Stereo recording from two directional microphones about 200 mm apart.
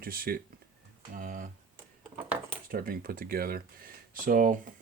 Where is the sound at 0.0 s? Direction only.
45° right (ahead or behind).